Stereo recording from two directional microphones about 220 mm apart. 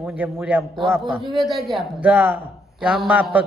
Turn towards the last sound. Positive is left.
turn(degrees=-5)  # may be behind; listen again after turning